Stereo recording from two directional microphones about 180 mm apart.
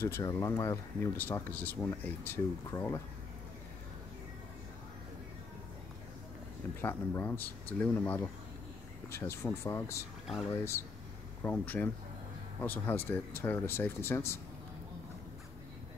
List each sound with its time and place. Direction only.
0.0 s speech: 15° left (ahead or behind)
6.8 s speech: 10° left (ahead or behind)
10.2 s speech: centre (ahead or behind)
10.5 s speech: 15° left (ahead or behind)